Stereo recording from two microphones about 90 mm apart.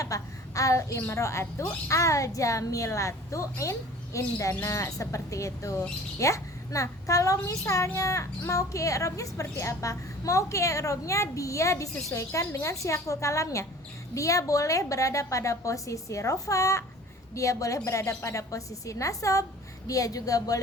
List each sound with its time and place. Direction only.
0.0 s a woman's voice: 40° left (ahead or behind)